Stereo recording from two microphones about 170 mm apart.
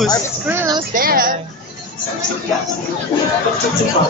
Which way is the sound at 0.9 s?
55° right (ahead or behind).